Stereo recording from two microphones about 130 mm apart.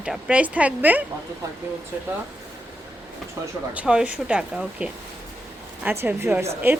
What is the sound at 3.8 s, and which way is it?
A woman's voice, 10° right (ahead or behind).